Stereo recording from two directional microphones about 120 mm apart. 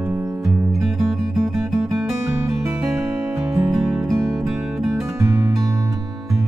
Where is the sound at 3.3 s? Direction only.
20° right (ahead or behind).